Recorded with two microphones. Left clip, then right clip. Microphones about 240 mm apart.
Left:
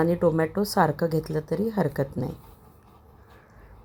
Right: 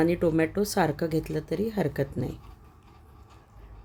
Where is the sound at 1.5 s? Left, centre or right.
Centre.